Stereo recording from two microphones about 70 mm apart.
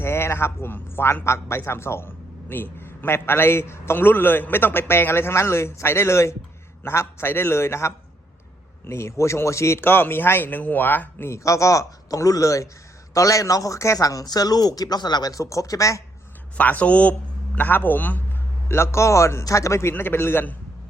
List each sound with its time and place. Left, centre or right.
0.0 s a man's voice: left
11.3 s a man's voice: left
14.3 s speech: left
16.6 s a man's voice: left
18.7 s a man's voice: left
19.9 s a man's voice: left